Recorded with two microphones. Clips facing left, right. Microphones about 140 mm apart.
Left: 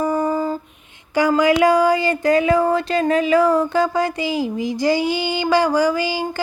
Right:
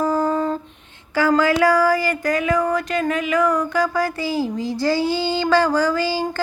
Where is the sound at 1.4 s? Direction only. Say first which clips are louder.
Left 3 dB; 20° left (ahead or behind).